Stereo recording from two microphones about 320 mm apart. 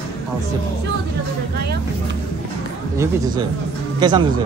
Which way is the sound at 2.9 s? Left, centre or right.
Centre.